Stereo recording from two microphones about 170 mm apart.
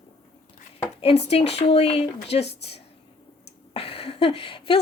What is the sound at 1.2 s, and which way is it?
A woman's voice, 40° left (ahead or behind).